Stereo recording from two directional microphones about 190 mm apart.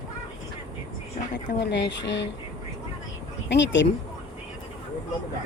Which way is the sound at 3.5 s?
70° left (ahead or behind).